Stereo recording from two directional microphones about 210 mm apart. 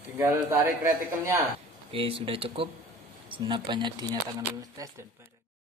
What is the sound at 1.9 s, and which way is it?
Speech, 25° right (ahead or behind).